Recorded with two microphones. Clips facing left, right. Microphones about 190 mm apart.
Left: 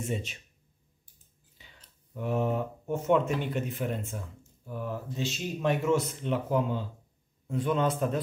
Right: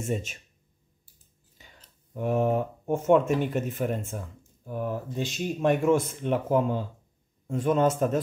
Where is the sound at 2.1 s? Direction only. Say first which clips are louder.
Right 4 dB; 50° right (ahead or behind).